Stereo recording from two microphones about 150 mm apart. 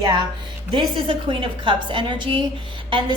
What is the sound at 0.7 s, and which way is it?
A woman's voice, 35° right (ahead or behind).